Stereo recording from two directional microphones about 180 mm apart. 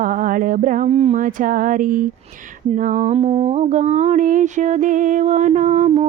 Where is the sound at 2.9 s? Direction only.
40° right (ahead or behind).